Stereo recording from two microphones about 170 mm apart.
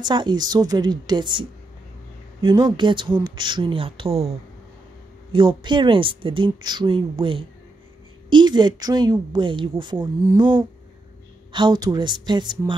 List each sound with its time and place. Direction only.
0.0 s speech: 25° right (ahead or behind)
2.4 s speech: 25° right (ahead or behind)
5.3 s speech: 30° right (ahead or behind)